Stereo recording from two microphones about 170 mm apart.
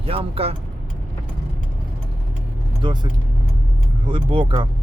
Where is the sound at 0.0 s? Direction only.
35° right (ahead or behind).